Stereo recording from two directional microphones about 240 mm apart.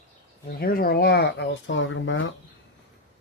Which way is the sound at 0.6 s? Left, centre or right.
Left.